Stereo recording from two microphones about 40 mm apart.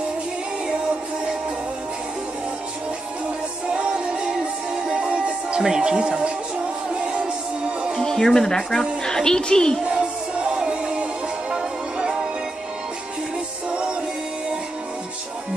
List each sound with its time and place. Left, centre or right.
4.8 s music: right
8.0 s a woman's voice: centre
11.5 s music: centre